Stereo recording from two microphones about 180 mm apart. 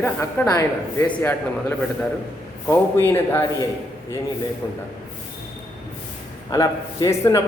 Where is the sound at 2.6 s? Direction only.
10° left (ahead or behind).